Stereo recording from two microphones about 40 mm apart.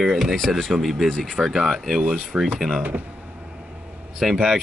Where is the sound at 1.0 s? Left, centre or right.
Centre.